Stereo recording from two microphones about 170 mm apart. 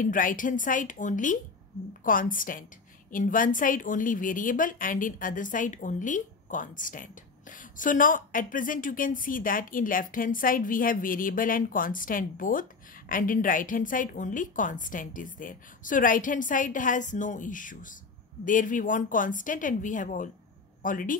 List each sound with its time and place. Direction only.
0.0 s speech: 50° left (ahead or behind)